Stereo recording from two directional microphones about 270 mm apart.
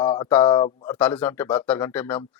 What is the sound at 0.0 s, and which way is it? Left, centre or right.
Speech, centre.